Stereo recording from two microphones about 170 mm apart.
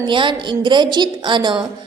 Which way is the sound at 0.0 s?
30° right (ahead or behind).